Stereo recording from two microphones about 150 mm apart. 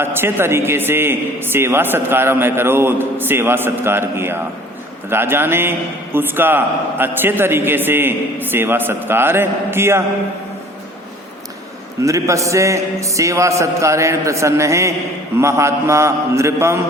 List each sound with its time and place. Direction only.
0.0 s a man's voice: 15° right (ahead or behind)
12.0 s music: 20° right (ahead or behind)